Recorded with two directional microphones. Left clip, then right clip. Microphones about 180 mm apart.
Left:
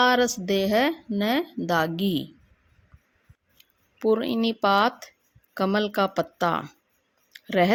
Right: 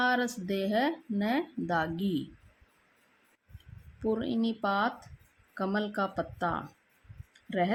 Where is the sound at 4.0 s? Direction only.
45° left (ahead or behind).